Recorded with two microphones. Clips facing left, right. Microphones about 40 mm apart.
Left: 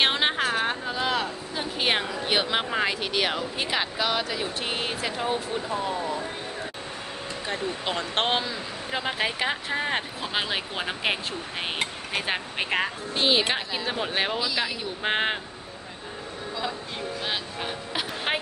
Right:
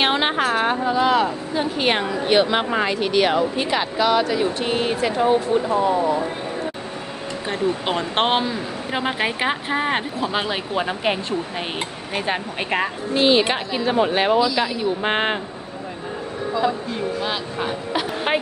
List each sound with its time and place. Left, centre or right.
0.0 s a sound: centre
0.9 s speech: centre
5.1 s speech: centre
5.9 s speech: right
7.4 s speech: right
10.2 s speech: centre
17.6 s speech: centre